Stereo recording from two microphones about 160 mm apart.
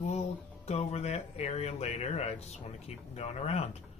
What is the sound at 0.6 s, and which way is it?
Speech, 40° left (ahead or behind).